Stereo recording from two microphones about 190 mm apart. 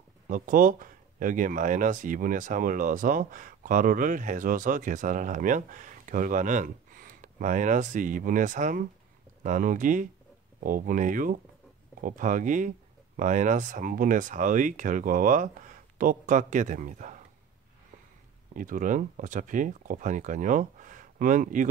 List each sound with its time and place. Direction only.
0.3 s speech: 45° right (ahead or behind)
18.5 s speech: 45° right (ahead or behind)